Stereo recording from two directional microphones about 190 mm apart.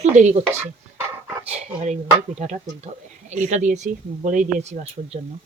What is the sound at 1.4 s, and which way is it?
Speech, 35° right (ahead or behind).